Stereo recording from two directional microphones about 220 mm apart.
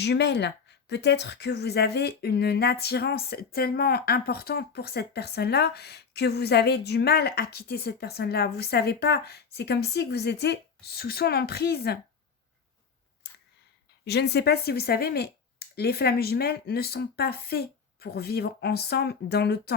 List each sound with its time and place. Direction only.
0.0 s speech: 50° left (ahead or behind)
14.0 s speech: 50° left (ahead or behind)